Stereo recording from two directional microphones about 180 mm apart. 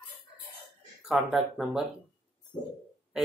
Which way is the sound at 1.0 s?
Centre (ahead or behind).